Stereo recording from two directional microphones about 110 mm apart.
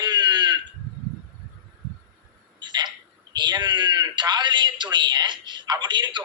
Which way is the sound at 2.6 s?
40° right (ahead or behind).